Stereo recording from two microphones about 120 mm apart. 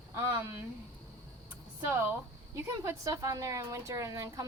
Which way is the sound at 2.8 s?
30° right (ahead or behind).